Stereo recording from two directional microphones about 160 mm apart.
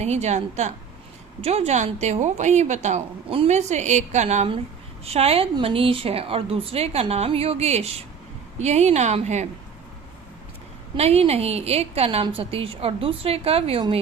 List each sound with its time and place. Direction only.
0.0 s a woman's voice: 45° right (ahead or behind)
10.9 s a woman's voice: 40° right (ahead or behind)